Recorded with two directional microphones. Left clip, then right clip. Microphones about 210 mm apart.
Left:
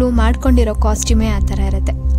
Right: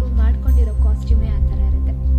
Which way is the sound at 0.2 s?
55° left (ahead or behind).